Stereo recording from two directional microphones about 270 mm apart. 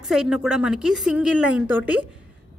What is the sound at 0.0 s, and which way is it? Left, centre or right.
A woman's voice, centre.